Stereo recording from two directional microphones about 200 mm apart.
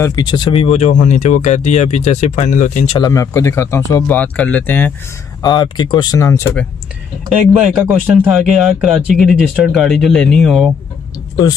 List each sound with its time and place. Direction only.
0.0 s speech: 20° left (ahead or behind); by 3.0 s 35° left (ahead or behind)
3.0 s speech: 15° left (ahead or behind)
5.4 s speech: 20° left (ahead or behind)
7.5 s speech: 5° right (ahead or behind)